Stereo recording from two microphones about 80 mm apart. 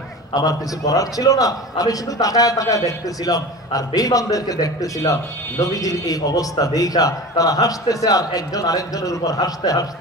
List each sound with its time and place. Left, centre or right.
0.3 s a man's voice: left